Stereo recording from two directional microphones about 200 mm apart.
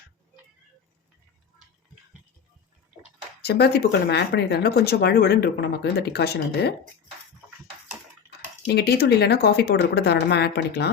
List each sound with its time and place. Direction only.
3.4 s speech: 55° left (ahead or behind)
8.6 s speech: 55° left (ahead or behind)